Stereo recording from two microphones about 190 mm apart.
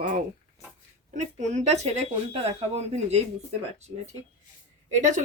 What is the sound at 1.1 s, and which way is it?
Speech, 40° right (ahead or behind).